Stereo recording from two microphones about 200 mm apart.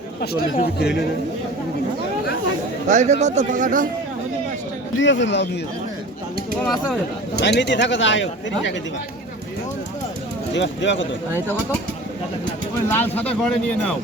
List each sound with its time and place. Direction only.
0.6 s speech: 55° left (ahead or behind)
2.9 s a man's voice: 35° right (ahead or behind)
4.9 s speech: 65° left (ahead or behind)
7.4 s speech: 60° left (ahead or behind)
10.5 s speech: 65° left (ahead or behind)
12.9 s speech: 10° left (ahead or behind)